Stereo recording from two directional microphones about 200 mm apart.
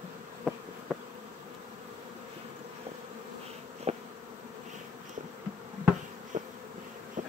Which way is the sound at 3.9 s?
30° right (ahead or behind).